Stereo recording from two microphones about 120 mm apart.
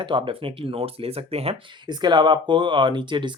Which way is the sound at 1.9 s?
40° right (ahead or behind).